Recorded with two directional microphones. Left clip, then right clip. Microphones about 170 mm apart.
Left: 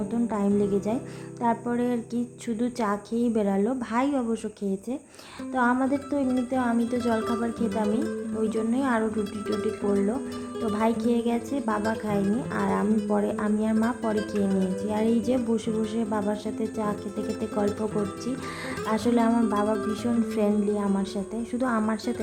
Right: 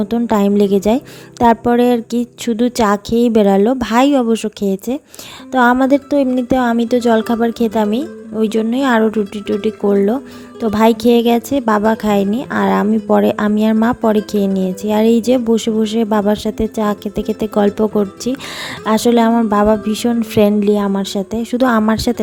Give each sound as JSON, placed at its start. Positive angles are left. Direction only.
{"t": 0.1, "sound": "a woman's voice", "side_deg": -55}
{"t": 10.6, "sound": "a woman's voice", "side_deg": -50}
{"t": 14.2, "sound": "speech", "side_deg": 0}
{"t": 14.8, "sound": "a woman's voice", "side_deg": -45}